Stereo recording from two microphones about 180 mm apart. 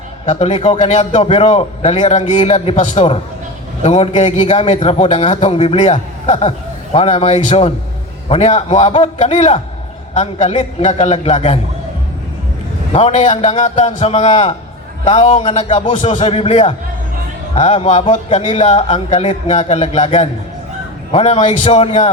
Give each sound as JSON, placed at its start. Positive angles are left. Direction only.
{"t": 0.3, "sound": "a man's voice", "side_deg": 35}
{"t": 12.9, "sound": "a man's voice", "side_deg": 35}